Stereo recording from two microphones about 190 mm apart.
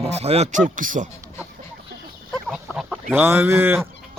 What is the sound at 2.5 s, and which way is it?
Chicken, 5° right (ahead or behind).